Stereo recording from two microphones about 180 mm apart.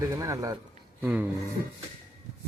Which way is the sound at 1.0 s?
10° right (ahead or behind).